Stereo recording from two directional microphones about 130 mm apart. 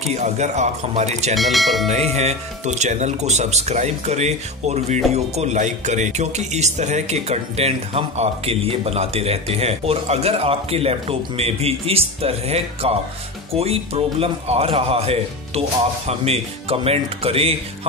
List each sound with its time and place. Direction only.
0.1 s speech: 60° right (ahead or behind)
1.3 s speech: centre (ahead or behind)
1.9 s speech: 60° right (ahead or behind)